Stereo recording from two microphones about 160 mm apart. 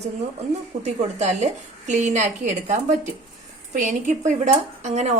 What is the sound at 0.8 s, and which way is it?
A woman's voice, 45° right (ahead or behind).